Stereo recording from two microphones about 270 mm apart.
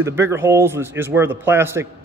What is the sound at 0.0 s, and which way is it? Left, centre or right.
A man's voice, centre.